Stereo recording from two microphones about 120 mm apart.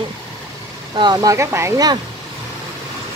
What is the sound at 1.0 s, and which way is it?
Speech, 35° right (ahead or behind).